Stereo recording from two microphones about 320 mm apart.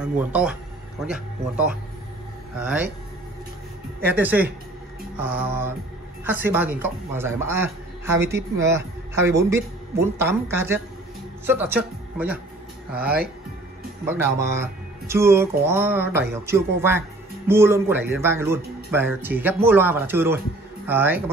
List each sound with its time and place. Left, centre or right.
0.0 s speech: centre
4.0 s a man's voice: centre